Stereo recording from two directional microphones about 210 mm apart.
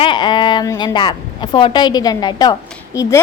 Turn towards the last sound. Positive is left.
turn(degrees=15)  # may be behind; listen again after turning